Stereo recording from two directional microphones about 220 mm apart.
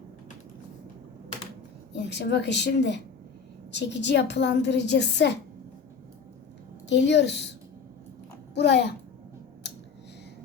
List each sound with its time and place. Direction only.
2.0 s a woman's voice: 50° left (ahead or behind)
6.8 s a woman's voice: 55° left (ahead or behind)
8.5 s a woman's voice: 50° left (ahead or behind)